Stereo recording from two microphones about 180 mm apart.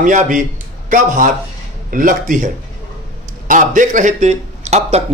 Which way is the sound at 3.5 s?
45° right (ahead or behind).